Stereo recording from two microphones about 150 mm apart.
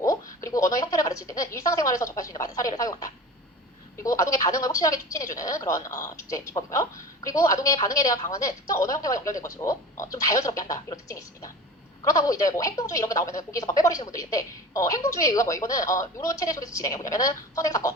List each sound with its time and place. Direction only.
0.0 s a woman's voice: 20° left (ahead or behind)